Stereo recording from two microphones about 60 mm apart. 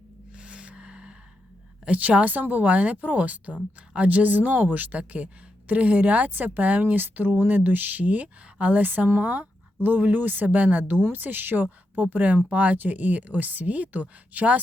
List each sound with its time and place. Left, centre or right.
0.3 s gasp: centre
1.8 s speech: right